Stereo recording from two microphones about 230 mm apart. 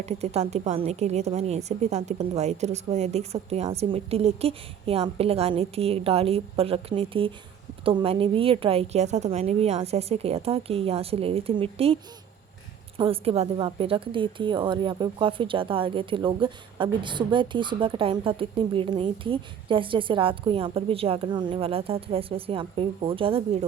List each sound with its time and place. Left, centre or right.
0.0 s a woman's voice: right
13.0 s a woman's voice: right